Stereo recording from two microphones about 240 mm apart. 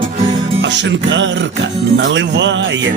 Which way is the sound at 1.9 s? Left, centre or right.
Right.